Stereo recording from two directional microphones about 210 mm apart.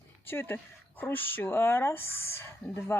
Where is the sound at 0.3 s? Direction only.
10° left (ahead or behind).